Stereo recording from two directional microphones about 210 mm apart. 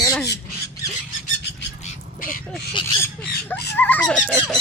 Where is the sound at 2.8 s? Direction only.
25° left (ahead or behind).